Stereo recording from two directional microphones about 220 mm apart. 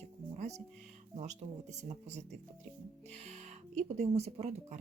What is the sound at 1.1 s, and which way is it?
Speech, 30° right (ahead or behind).